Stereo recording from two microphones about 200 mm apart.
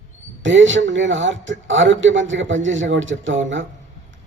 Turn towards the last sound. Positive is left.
turn(degrees=-70)  # may be behind; listen again after turning